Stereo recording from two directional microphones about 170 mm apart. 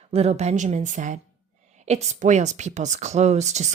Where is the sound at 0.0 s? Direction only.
40° right (ahead or behind).